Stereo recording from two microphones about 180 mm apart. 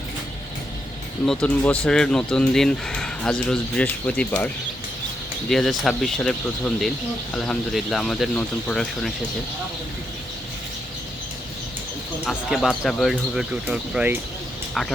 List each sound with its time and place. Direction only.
1.2 s speech: 5° left (ahead or behind)
5.5 s speech: centre (ahead or behind)
12.2 s speech: 5° left (ahead or behind)